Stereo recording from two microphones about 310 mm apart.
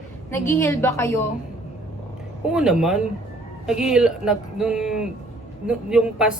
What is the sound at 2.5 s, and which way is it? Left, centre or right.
A man's voice, centre.